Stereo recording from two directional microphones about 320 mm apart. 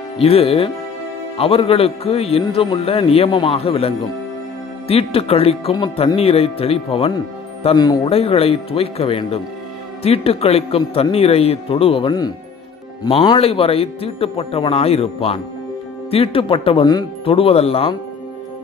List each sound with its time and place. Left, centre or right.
0.2 s a man's voice: centre